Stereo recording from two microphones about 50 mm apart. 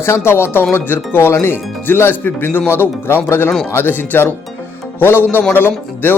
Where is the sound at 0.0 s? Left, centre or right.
Left.